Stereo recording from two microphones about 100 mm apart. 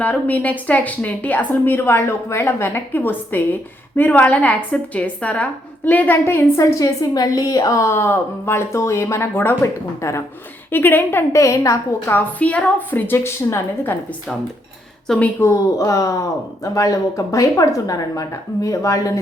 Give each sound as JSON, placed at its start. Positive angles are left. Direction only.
{"t": 0.0, "sound": "a woman's voice", "side_deg": 15}
{"t": 6.6, "sound": "a woman's voice", "side_deg": 35}
{"t": 12.1, "sound": "a woman's voice", "side_deg": 15}
{"t": 15.0, "sound": "speech", "side_deg": 5}
{"t": 15.8, "sound": "speech", "side_deg": 35}